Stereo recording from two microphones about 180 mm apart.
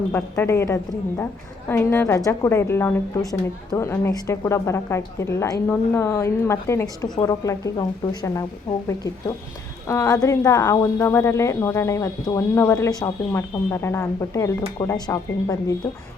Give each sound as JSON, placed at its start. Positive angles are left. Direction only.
{"t": 0.1, "sound": "a woman's voice", "side_deg": 15}
{"t": 9.8, "sound": "speech", "side_deg": 15}